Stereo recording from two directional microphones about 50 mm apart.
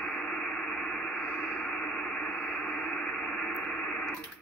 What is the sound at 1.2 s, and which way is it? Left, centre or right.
Radio, left.